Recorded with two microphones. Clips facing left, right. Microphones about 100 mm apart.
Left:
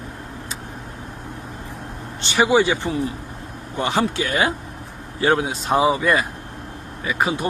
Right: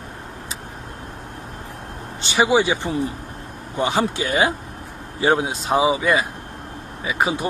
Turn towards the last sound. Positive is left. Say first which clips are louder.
# even
turn(degrees=-15)  # may be behind; listen again after turning